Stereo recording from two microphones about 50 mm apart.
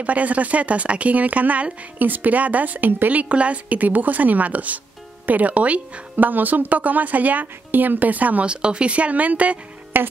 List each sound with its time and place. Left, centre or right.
0.0 s speech: right
8.5 s speech: right
9.9 s speech: right